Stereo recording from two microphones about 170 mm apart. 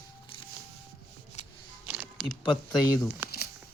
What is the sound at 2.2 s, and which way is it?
Speech, centre (ahead or behind).